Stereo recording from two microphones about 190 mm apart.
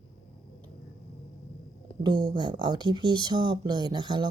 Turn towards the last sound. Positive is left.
turn(degrees=-25)  # may be behind; listen again after turning